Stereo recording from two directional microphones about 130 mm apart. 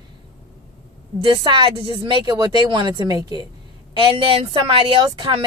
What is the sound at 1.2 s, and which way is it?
Speech, 40° right (ahead or behind).